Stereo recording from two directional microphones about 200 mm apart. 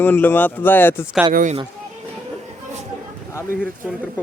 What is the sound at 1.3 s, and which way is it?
Speech, 40° right (ahead or behind).